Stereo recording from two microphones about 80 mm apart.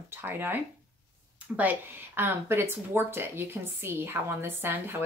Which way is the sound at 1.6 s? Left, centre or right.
Right.